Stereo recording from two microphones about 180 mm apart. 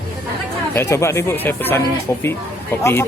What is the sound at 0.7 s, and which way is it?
Speech, 15° left (ahead or behind).